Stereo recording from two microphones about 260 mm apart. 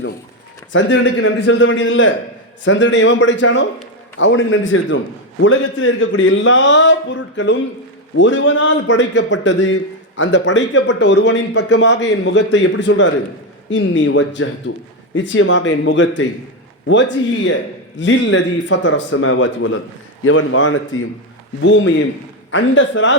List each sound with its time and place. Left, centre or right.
0.7 s a man's voice: left